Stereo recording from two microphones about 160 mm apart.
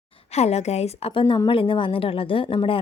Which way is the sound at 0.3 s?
40° left (ahead or behind).